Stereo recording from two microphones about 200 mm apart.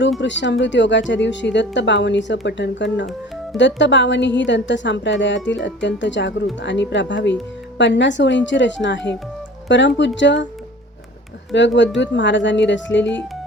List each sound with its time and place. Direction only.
0.2 s speech: 65° left (ahead or behind)
11.5 s speech: 65° left (ahead or behind)